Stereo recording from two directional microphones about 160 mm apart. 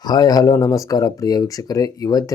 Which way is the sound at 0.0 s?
25° left (ahead or behind).